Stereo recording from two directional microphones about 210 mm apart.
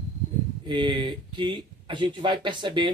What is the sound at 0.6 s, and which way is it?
Speech, 25° right (ahead or behind).